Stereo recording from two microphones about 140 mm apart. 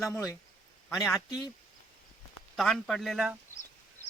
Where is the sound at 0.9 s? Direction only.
5° left (ahead or behind).